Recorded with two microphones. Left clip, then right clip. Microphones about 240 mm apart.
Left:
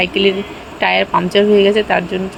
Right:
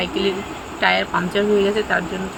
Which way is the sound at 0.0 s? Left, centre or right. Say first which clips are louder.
Left 7 dB; left.